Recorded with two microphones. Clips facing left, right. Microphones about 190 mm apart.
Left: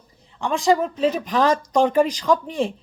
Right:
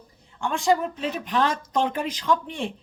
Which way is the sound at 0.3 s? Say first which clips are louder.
Left 3 dB; centre (ahead or behind).